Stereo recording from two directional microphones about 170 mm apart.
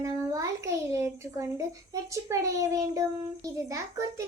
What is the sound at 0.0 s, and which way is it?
A child's voice, 20° right (ahead or behind).